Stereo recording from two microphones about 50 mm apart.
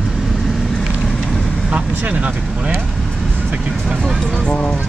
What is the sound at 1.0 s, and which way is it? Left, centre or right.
Vehicle, centre.